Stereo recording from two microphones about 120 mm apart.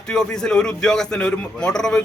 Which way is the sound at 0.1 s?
5° left (ahead or behind).